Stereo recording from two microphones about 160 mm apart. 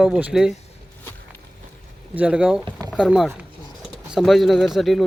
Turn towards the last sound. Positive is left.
turn(degrees=0)  # may be behind; listen again after turning